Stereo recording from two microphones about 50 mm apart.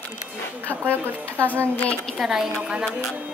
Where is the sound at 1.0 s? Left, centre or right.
Right.